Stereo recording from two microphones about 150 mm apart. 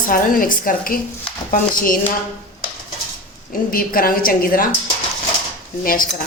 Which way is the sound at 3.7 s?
75° left (ahead or behind).